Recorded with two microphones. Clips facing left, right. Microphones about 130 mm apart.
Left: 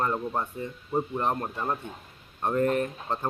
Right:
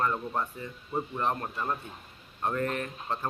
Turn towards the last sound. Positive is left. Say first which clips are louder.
# left 6 dB
turn(degrees=25)  # may be behind; listen again after turning